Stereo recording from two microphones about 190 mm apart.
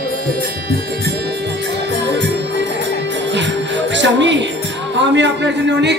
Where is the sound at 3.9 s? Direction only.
70° right (ahead or behind).